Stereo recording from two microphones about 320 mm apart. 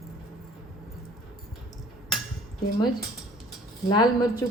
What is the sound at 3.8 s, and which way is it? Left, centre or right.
Speech, centre.